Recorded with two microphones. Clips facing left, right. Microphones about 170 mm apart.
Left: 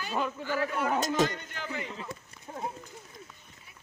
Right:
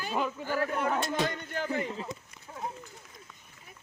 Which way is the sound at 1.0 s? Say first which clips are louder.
Left 3 dB; 45° left (ahead or behind).